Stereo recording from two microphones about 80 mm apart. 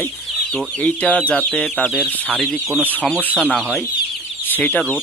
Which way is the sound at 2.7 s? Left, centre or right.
Right.